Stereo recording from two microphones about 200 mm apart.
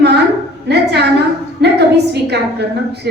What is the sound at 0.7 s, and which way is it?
Speech, 55° right (ahead or behind).